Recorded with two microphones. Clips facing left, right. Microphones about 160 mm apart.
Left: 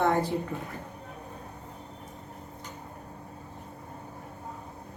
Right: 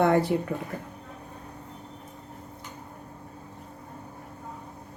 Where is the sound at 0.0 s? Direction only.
70° right (ahead or behind).